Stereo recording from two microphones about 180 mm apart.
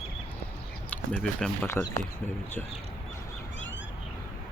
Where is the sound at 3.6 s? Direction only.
90° left.